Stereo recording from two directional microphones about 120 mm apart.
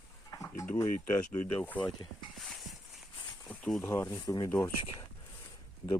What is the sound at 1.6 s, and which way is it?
Speech, 15° left (ahead or behind).